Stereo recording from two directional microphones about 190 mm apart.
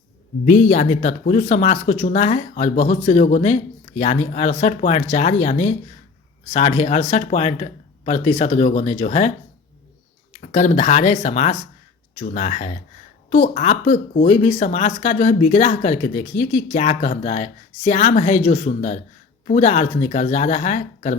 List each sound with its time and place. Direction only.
0.4 s speech: 40° left (ahead or behind)
10.3 s speech: 40° left (ahead or behind)